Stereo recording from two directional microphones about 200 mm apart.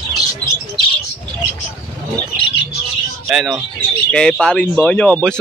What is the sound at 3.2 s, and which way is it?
A man's voice, 5° right (ahead or behind).